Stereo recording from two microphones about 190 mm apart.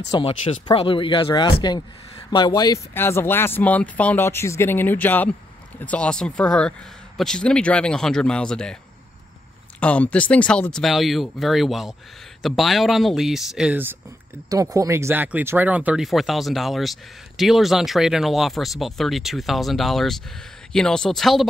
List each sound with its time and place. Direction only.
0.1 s speech: 25° left (ahead or behind); by 8.7 s 5° left (ahead or behind)
9.8 s speech: 5° left (ahead or behind)